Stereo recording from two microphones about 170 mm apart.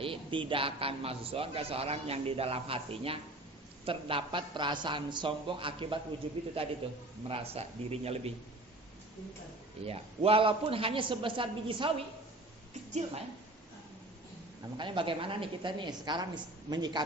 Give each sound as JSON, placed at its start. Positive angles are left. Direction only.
{"t": 0.0, "sound": "a man's voice", "side_deg": -30}
{"t": 9.8, "sound": "a man's voice", "side_deg": -35}
{"t": 14.8, "sound": "a woman's voice", "side_deg": -30}